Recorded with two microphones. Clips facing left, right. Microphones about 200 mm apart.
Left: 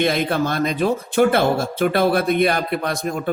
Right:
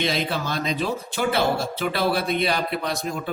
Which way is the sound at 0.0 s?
55° left (ahead or behind).